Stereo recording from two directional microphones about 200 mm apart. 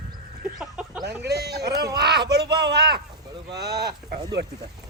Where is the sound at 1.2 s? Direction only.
55° right (ahead or behind).